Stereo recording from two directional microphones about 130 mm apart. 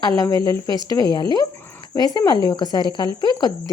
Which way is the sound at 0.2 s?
30° left (ahead or behind).